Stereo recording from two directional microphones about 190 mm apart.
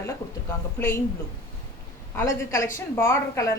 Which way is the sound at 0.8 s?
10° left (ahead or behind).